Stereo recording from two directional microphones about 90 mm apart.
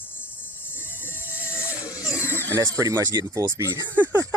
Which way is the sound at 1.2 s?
20° right (ahead or behind).